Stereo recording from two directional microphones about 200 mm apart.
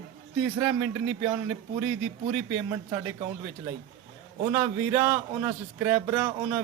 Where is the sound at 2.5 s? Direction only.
15° right (ahead or behind).